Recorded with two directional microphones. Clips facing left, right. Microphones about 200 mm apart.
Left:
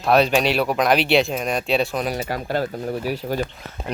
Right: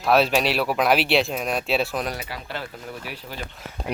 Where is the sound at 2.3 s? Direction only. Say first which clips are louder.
Left 10 dB; 45° left (ahead or behind).